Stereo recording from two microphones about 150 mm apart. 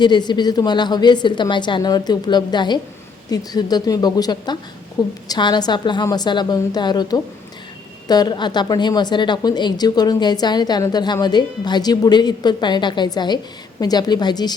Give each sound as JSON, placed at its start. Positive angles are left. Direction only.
{"t": 0.0, "sound": "a woman's voice", "side_deg": 30}